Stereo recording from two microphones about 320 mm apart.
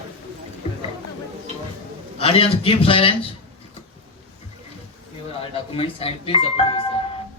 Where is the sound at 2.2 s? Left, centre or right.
Centre.